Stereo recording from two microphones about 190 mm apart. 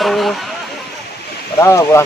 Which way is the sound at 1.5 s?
15° left (ahead or behind).